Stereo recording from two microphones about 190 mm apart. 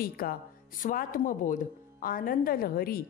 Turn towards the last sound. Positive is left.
turn(degrees=50)  # may be behind; listen again after turning